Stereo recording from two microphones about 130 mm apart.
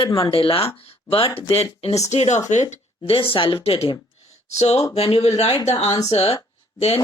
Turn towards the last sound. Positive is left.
turn(degrees=50)  # may be behind; listen again after turning